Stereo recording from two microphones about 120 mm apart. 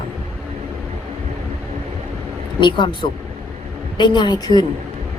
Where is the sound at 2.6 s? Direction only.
40° left (ahead or behind).